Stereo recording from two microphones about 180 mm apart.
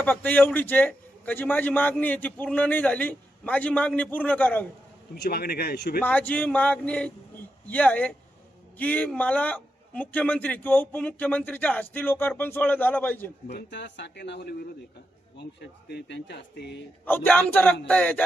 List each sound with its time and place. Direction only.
0.0 s a man's voice: 10° left (ahead or behind)
5.1 s a man's voice: 60° left (ahead or behind)
6.0 s a man's voice: 10° left (ahead or behind)
13.5 s speech: 70° left (ahead or behind)
17.1 s a man's voice: 10° left (ahead or behind)